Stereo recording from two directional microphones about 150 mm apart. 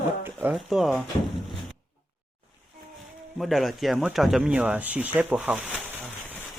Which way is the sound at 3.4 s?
Centre (ahead or behind).